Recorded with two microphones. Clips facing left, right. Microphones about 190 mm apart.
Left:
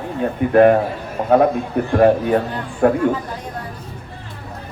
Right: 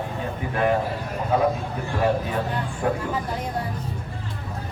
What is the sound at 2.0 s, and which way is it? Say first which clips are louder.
Speech: left 9 dB; 55° left (ahead or behind).